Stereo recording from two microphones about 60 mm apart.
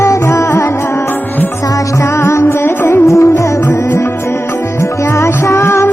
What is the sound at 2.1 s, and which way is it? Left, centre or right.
Music, left.